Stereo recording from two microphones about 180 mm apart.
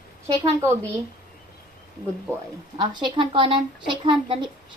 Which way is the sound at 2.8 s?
25° right (ahead or behind).